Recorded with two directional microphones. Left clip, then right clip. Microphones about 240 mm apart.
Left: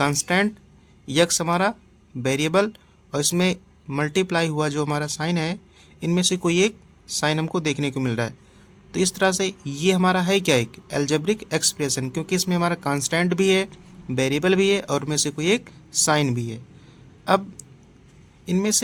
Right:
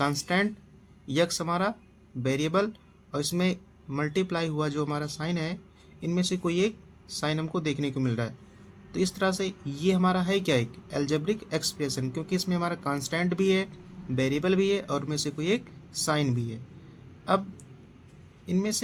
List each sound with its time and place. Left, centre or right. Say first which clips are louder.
0.0 s speech: left 6 dB; left
18.4 s speech: left 7 dB; left